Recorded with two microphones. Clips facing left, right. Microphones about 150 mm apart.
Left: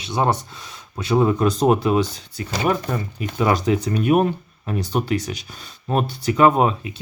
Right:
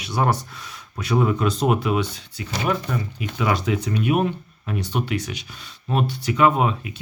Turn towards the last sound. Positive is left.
turn(degrees=35)  # may be behind; listen again after turning